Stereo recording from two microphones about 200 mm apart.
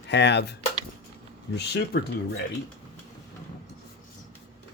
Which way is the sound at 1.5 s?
55° left (ahead or behind).